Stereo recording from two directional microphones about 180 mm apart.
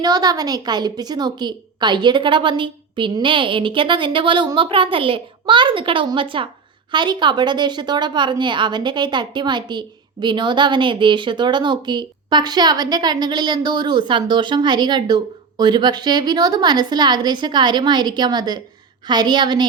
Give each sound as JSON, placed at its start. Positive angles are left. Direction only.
{"t": 0.0, "sound": "a woman's voice", "side_deg": -20}